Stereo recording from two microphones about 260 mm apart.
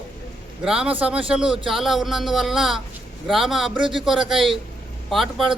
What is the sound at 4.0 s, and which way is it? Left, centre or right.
Speech, centre.